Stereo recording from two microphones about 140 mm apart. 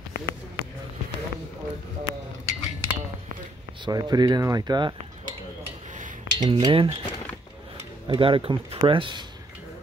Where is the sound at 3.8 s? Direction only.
30° right (ahead or behind).